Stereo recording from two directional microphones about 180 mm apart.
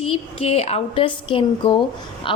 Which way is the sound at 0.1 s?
35° left (ahead or behind).